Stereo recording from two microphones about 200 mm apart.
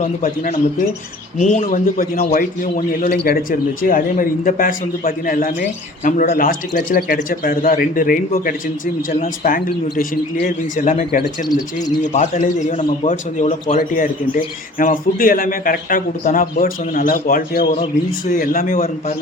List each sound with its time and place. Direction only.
0.0 s a man's voice: 40° left (ahead or behind)
13.7 s a man's voice: 45° left (ahead or behind)